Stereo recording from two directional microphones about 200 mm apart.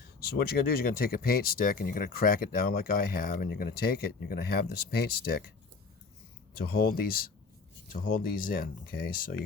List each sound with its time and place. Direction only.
0.2 s speech: 50° left (ahead or behind)
6.6 s speech: 50° left (ahead or behind)